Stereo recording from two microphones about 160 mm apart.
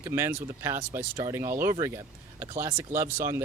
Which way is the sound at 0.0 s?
15° right (ahead or behind).